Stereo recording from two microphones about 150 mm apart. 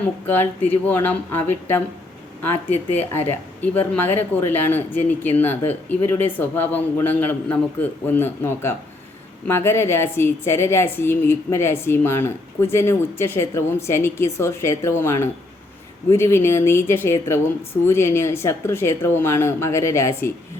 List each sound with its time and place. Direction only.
0.3 s a woman's voice: 15° left (ahead or behind)
3.1 s a woman's voice: 15° left (ahead or behind)